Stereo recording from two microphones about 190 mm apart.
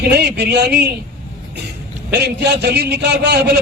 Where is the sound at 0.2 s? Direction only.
60° right (ahead or behind).